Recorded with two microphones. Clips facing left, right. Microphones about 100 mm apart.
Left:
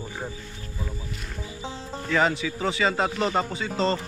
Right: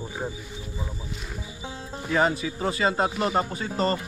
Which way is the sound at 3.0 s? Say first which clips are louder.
Even; 10° right (ahead or behind).